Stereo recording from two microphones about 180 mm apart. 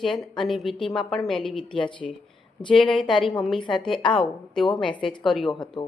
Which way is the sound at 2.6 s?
25° left (ahead or behind).